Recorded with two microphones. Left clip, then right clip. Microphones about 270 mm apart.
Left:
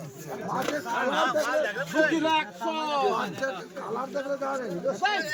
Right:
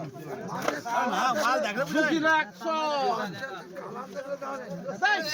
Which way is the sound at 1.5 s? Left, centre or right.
Right.